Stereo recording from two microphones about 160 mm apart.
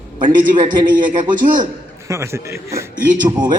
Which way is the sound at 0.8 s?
25° right (ahead or behind).